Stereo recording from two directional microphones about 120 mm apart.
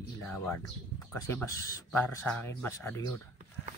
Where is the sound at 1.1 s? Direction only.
25° left (ahead or behind).